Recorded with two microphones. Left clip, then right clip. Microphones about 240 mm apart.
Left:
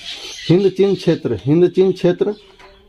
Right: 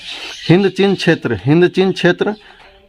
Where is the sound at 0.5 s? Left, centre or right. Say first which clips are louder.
Right 1 dB; right.